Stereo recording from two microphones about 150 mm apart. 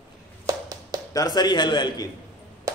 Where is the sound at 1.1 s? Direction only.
25° left (ahead or behind).